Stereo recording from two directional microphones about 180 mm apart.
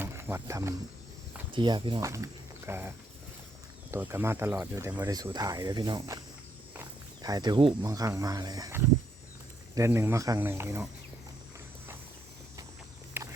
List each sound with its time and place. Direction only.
0.0 s wild animals: 15° right (ahead or behind)
1.5 s speech: 25° right (ahead or behind)
3.9 s speech: 15° right (ahead or behind)
7.2 s speech: 20° right (ahead or behind)
13.2 s walk: 10° right (ahead or behind)